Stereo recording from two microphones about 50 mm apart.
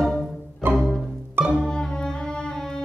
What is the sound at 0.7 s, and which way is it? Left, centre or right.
Music, centre.